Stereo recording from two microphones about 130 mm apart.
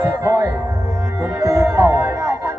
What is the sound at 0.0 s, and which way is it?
Music, 25° right (ahead or behind).